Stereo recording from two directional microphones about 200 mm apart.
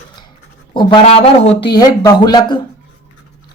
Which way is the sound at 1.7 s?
20° left (ahead or behind).